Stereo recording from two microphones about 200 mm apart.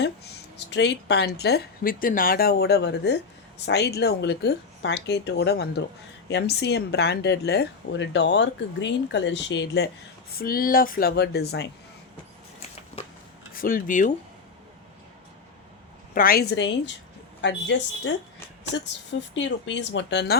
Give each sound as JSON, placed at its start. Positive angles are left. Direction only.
{"t": 0.7, "sound": "speech", "side_deg": 60}
{"t": 10.3, "sound": "speech", "side_deg": 45}
{"t": 13.5, "sound": "speech", "side_deg": 45}
{"t": 16.1, "sound": "speech", "side_deg": 45}
{"t": 19.4, "sound": "speech", "side_deg": 65}